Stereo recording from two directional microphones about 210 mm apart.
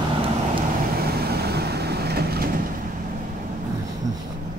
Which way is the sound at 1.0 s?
50° right (ahead or behind).